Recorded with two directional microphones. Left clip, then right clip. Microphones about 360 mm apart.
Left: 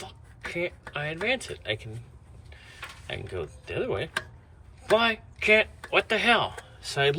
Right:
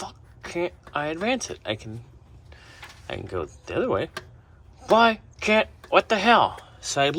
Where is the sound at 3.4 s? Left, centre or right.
Centre.